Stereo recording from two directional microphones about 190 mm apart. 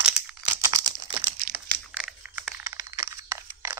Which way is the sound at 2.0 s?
5° right (ahead or behind).